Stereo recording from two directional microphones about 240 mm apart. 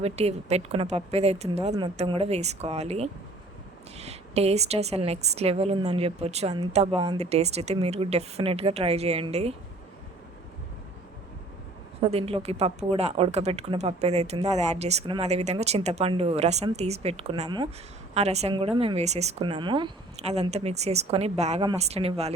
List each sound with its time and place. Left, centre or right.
0.0 s speech: right
11.9 s speech: right